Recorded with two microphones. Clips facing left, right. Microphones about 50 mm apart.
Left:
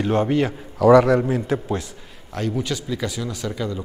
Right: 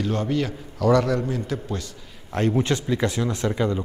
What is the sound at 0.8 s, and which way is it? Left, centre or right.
A man's voice, centre.